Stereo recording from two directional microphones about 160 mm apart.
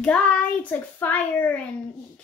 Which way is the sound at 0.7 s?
10° left (ahead or behind).